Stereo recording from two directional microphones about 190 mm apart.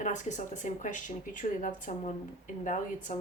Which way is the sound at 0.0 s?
40° left (ahead or behind).